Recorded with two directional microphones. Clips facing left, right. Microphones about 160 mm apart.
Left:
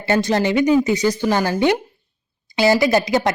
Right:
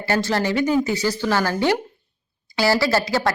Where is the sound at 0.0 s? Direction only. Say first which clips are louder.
Left 3 dB; 20° left (ahead or behind).